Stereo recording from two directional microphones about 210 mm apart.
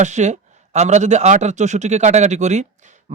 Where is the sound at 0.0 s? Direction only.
35° right (ahead or behind).